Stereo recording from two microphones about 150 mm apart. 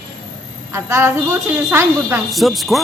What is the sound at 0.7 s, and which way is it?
Speech, 15° right (ahead or behind).